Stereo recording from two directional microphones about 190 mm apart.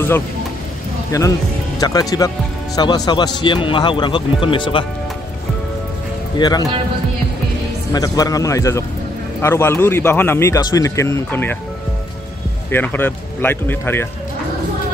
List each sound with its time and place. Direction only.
1.1 s speech: 15° left (ahead or behind)
6.3 s speech: 20° left (ahead or behind)
7.9 s speech: 20° left (ahead or behind)
12.7 s speech: 10° left (ahead or behind)